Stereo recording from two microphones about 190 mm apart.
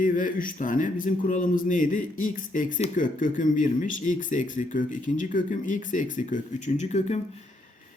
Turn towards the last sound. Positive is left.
turn(degrees=35)  # may be behind; listen again after turning